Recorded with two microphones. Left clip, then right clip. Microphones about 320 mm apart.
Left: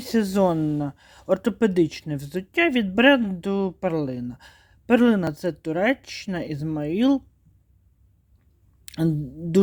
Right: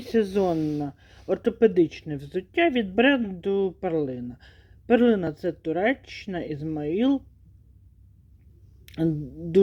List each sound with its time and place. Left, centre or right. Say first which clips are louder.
0.0 s speech: left 2 dB; left
8.9 s speech: left 1 dB; left